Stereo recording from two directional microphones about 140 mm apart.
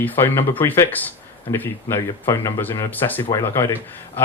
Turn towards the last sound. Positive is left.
turn(degrees=20)  # may be behind; listen again after turning